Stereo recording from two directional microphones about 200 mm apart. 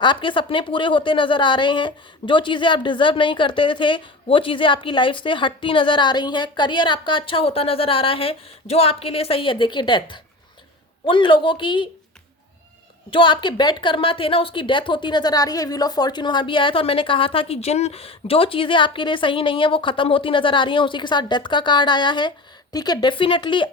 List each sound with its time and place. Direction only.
0.0 s a woman's voice: 25° left (ahead or behind)
13.1 s a woman's voice: 25° left (ahead or behind)